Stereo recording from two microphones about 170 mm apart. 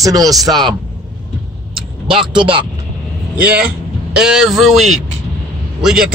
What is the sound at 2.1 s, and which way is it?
Speech, 30° right (ahead or behind).